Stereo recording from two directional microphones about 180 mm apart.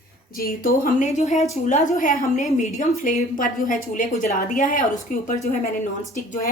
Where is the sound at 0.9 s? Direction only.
45° left (ahead or behind).